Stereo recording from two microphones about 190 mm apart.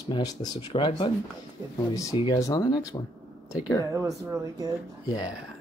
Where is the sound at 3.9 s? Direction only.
15° right (ahead or behind).